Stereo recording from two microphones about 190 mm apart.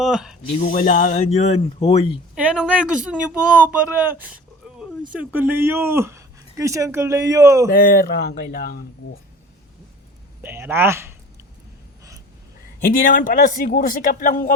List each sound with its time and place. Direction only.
0.0 s a woman's voice: centre (ahead or behind)
0.6 s speech: 40° left (ahead or behind)
2.3 s a woman's voice: 5° right (ahead or behind)
4.6 s a sound: 5° right (ahead or behind)
5.1 s speech: 10° right (ahead or behind)
7.7 s speech: 50° left (ahead or behind)
10.4 s speech: 10° right (ahead or behind)
12.8 s speech: 50° left (ahead or behind)